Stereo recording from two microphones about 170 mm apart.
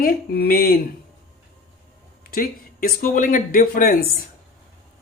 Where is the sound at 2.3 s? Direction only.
60° left (ahead or behind).